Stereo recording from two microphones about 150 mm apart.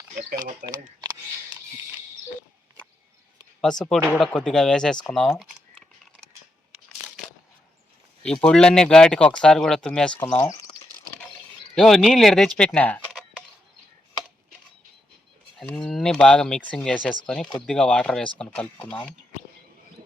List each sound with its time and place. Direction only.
0.6 s speech: 30° right (ahead or behind)
3.8 s speech: centre (ahead or behind)
8.2 s speech: 5° left (ahead or behind)
10.2 s speech: 15° left (ahead or behind)
11.7 s speech: centre (ahead or behind)
15.5 s speech: 5° left (ahead or behind)